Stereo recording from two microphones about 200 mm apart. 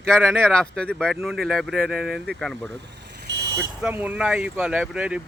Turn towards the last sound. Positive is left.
turn(degrees=-5)  # may be behind; listen again after turning